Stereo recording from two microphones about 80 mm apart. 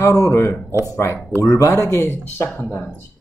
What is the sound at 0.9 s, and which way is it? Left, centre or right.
Speech, left.